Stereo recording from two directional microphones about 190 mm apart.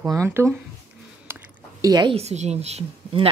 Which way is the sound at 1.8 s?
20° right (ahead or behind).